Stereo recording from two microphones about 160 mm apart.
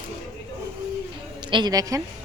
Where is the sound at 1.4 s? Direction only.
30° right (ahead or behind).